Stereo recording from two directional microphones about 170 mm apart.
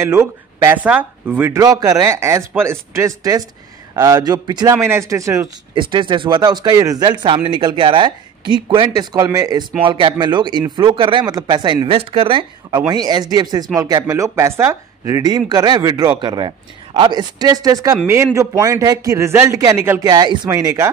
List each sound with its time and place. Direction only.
0.0 s a man's voice: 15° right (ahead or behind)
1.6 s a man's voice: 20° right (ahead or behind)
5.8 s a man's voice: 30° right (ahead or behind)